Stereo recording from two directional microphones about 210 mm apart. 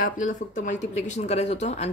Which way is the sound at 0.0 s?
35° left (ahead or behind).